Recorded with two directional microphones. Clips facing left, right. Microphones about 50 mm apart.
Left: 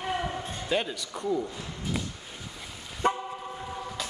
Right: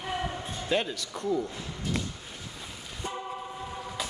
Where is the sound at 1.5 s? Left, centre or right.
Centre.